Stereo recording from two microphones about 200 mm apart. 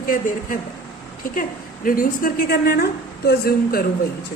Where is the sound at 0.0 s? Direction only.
40° left (ahead or behind).